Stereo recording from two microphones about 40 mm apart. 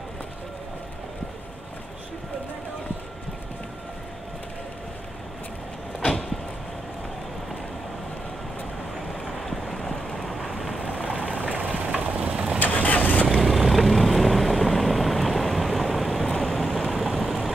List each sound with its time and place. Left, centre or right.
5.9 s vehicle: centre
9.2 s a sound: centre
11.0 s vehicle: right
12.5 s vehicle: left
13.3 s vehicle: centre
16.4 s a sound: centre
16.9 s vehicle: centre